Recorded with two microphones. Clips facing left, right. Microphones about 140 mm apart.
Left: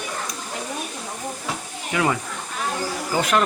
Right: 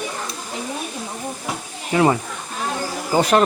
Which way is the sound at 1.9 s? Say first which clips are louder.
Right 6 dB; 30° right (ahead or behind).